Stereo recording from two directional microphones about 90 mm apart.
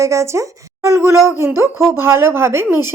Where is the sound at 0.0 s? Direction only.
35° right (ahead or behind).